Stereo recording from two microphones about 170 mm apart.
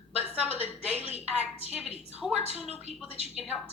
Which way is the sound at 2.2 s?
5° right (ahead or behind).